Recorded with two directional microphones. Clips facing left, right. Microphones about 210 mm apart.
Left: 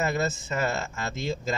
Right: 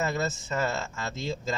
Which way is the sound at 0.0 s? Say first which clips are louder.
Left 2 dB; 15° left (ahead or behind).